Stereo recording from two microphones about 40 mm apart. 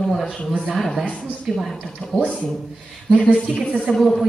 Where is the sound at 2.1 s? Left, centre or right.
Left.